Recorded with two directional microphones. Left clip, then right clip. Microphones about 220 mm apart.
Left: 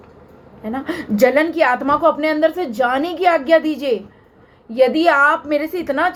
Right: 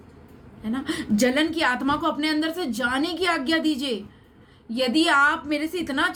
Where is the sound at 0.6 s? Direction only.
10° right (ahead or behind).